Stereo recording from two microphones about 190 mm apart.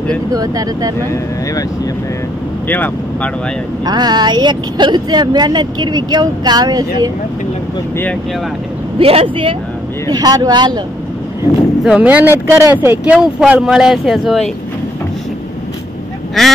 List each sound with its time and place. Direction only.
0.3 s speech: 20° right (ahead or behind)
2.7 s speech: 10° left (ahead or behind)
3.8 s speech: 20° right (ahead or behind)
8.9 s speech: 30° right (ahead or behind)
11.8 s speech: 5° right (ahead or behind)
16.4 s speech: centre (ahead or behind)